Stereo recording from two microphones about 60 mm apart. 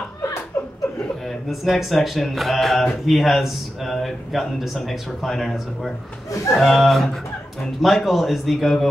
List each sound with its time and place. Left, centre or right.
1.5 s speech: centre
6.3 s a man's voice: left
6.6 s speech: centre